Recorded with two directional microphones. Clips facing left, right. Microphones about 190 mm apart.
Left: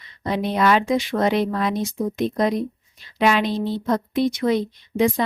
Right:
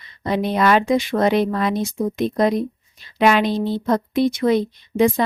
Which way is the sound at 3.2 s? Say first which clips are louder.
Right 3 dB; 60° right (ahead or behind).